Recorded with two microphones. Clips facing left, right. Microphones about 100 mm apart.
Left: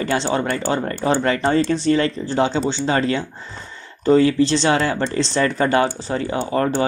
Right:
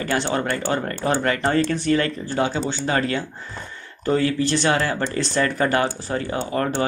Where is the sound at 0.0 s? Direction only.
25° left (ahead or behind).